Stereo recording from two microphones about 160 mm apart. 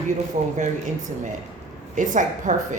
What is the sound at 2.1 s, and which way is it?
Speech, 50° right (ahead or behind).